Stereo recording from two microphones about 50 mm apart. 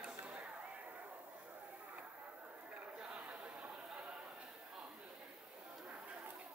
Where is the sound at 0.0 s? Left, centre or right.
Right.